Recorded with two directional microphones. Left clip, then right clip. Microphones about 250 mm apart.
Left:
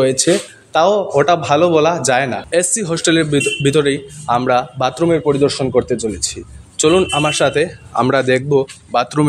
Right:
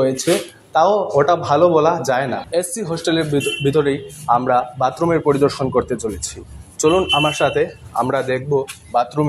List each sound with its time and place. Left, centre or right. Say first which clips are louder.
0.0 s speech: left 3 dB; left